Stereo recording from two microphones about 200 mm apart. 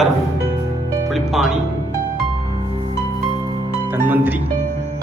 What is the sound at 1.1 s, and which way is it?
Music, centre (ahead or behind).